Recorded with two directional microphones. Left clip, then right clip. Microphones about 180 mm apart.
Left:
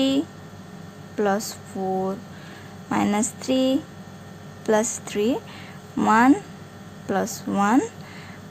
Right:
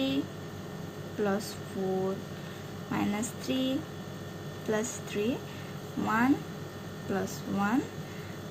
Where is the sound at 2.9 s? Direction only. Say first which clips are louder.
Left 10 dB; 35° left (ahead or behind).